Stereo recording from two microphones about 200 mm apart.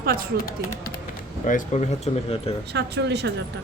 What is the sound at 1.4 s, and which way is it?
Speech, 35° left (ahead or behind).